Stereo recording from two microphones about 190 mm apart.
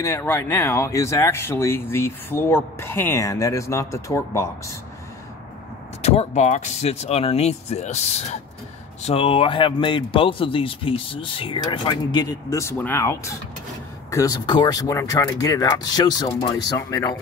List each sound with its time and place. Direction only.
0.0 s speech: 15° left (ahead or behind)
6.0 s a man's voice: 35° left (ahead or behind); by 17.2 s 20° left (ahead or behind)